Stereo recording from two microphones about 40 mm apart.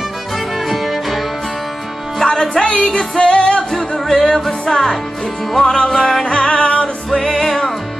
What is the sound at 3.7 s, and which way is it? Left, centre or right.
Music, centre.